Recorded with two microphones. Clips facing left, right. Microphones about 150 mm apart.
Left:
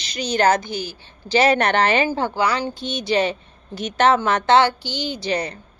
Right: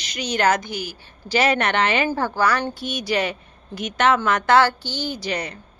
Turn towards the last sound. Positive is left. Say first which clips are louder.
# left 4 dB
turn(degrees=30)  # may be behind; listen again after turning